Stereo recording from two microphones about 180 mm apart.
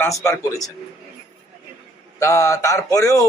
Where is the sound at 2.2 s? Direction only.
15° left (ahead or behind).